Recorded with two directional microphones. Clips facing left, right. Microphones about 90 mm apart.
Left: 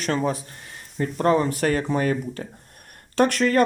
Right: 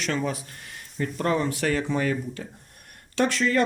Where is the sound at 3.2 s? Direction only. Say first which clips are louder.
Left 4 dB; 55° left (ahead or behind).